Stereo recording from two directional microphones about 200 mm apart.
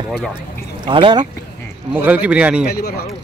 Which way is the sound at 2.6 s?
50° left (ahead or behind).